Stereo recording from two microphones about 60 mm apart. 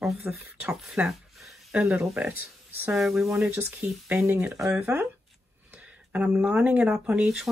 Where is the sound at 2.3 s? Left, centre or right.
Right.